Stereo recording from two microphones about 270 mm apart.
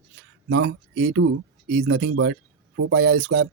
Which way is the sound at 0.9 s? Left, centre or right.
Right.